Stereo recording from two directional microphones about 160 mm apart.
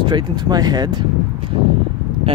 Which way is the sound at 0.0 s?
30° right (ahead or behind).